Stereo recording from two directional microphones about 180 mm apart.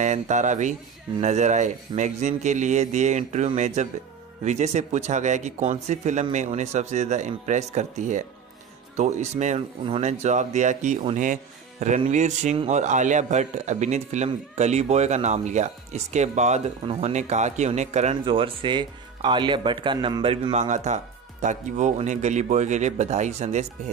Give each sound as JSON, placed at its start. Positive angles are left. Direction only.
{"t": 0.0, "sound": "a man's voice", "side_deg": -40}
{"t": 18.2, "sound": "a man's voice", "side_deg": -30}